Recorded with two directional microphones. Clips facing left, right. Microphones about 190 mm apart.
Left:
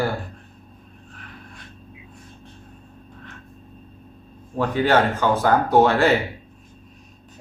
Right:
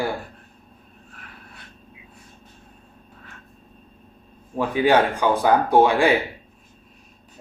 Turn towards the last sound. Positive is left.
turn(degrees=-10)  # may be behind; listen again after turning